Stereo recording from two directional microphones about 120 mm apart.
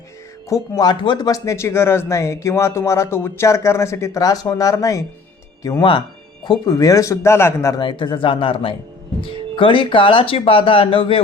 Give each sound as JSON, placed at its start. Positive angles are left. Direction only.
{"t": 0.4, "sound": "speech", "side_deg": 30}
{"t": 7.8, "sound": "speech", "side_deg": 40}